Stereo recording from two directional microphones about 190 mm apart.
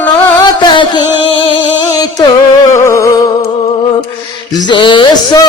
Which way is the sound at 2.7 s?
15° left (ahead or behind).